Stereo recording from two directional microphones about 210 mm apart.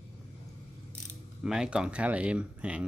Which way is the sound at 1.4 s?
5° right (ahead or behind).